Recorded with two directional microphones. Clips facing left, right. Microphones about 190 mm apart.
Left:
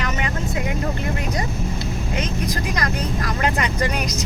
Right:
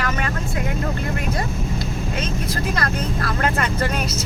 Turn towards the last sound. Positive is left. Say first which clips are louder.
# even
turn(degrees=15)  # may be behind; listen again after turning